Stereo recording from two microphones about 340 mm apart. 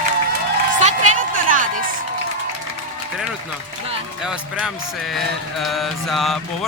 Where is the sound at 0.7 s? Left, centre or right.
Right.